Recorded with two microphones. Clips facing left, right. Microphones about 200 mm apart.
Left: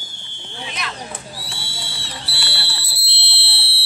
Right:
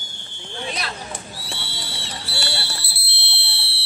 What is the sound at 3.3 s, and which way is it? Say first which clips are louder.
Fire alarm: left 2 dB; 65° left (ahead or behind).